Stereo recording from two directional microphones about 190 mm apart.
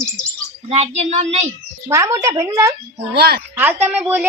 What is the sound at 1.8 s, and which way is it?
Speech, 15° right (ahead or behind).